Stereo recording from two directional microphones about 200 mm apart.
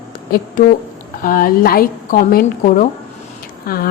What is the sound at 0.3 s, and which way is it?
A woman's voice, 45° left (ahead or behind).